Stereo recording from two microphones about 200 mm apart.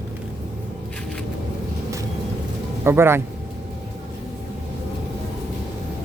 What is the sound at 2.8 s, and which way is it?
Speech, 10° right (ahead or behind).